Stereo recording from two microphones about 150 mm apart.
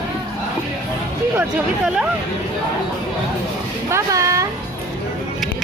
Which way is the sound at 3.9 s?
20° right (ahead or behind).